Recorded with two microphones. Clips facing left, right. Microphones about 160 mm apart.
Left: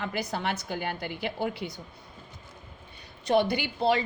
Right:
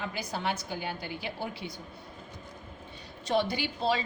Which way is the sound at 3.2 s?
60° left (ahead or behind).